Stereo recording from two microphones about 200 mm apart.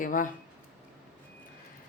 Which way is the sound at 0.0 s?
40° left (ahead or behind).